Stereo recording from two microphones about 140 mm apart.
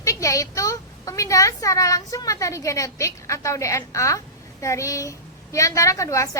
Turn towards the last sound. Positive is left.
turn(degrees=20)  # may be behind; listen again after turning